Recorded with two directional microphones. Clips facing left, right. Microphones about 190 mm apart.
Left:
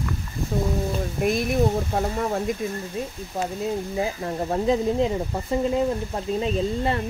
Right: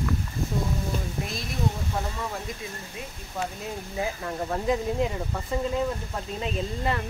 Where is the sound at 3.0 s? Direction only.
40° left (ahead or behind).